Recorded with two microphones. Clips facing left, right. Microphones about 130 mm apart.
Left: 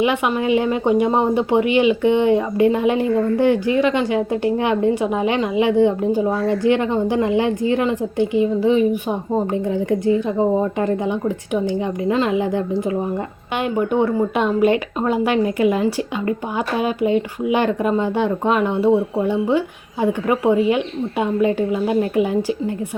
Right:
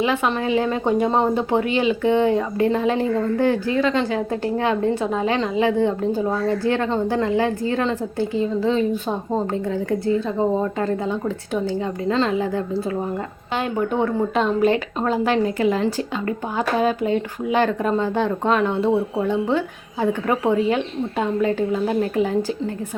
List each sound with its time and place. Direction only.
0.0 s speech: 15° left (ahead or behind)